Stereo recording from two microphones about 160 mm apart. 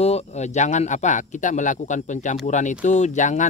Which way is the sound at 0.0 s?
40° left (ahead or behind).